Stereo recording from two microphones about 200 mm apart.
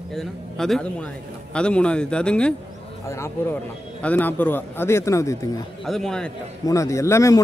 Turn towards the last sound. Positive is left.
turn(degrees=15)  # may be behind; listen again after turning